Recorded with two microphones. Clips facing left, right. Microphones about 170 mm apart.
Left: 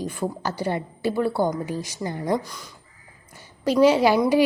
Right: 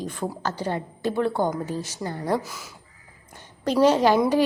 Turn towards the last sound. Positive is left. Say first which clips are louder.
# left 1 dB
turn(degrees=10)  # may be behind; listen again after turning